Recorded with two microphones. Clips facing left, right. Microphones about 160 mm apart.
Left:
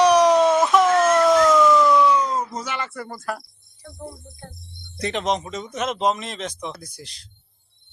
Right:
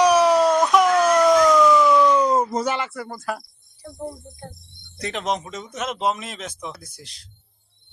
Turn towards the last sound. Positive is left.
turn(degrees=0)  # may be behind; listen again after turning